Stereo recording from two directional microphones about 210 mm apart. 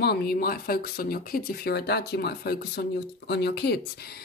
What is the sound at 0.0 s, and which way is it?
Speech, 50° left (ahead or behind).